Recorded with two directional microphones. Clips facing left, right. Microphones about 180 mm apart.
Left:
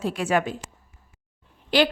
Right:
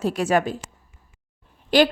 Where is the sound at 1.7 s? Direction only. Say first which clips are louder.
Right 3 dB; 45° right (ahead or behind).